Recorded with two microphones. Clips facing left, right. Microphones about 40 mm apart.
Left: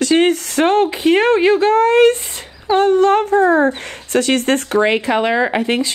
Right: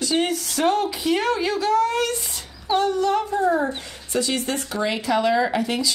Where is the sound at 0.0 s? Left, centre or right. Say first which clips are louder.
Left 9 dB; left.